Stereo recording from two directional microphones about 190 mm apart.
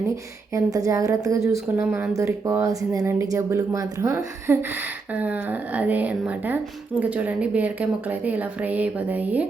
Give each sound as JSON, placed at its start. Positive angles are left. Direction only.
{"t": 0.5, "sound": "speech", "side_deg": -15}